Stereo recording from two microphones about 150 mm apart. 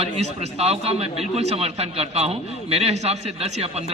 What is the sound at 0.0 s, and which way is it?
A man's voice, 45° right (ahead or behind).